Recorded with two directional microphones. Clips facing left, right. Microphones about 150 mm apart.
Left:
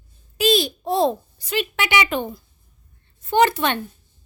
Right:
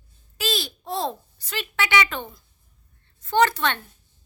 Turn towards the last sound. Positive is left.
turn(degrees=15)  # may be behind; listen again after turning